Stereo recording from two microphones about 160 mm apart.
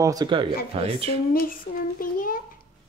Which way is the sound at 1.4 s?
60° left (ahead or behind).